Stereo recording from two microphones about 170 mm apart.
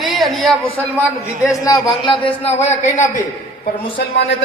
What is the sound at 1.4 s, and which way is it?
Speech, 20° left (ahead or behind).